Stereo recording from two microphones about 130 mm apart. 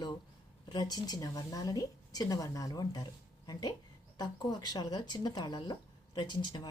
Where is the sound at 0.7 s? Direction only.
30° left (ahead or behind).